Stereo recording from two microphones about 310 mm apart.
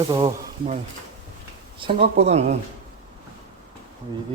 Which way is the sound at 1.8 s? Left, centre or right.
Centre.